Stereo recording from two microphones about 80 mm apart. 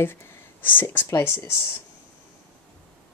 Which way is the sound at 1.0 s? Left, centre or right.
Left.